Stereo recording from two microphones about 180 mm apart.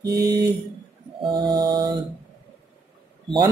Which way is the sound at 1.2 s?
25° right (ahead or behind).